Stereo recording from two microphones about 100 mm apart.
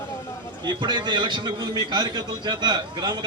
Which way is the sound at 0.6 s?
45° right (ahead or behind).